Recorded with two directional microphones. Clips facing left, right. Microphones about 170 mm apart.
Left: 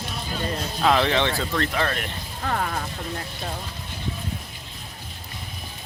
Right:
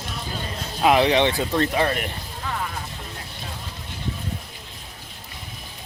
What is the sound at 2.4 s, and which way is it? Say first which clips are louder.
Speech: left 4 dB; 55° left (ahead or behind).